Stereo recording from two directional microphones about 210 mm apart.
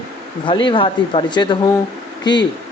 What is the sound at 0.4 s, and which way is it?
Speech, 20° left (ahead or behind).